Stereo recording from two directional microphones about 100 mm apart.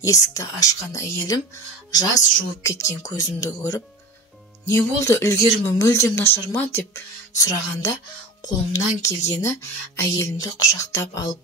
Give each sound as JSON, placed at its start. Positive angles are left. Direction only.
{"t": 0.0, "sound": "speech", "side_deg": 35}